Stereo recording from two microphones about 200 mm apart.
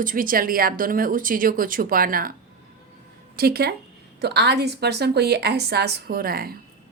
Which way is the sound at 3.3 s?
50° right (ahead or behind).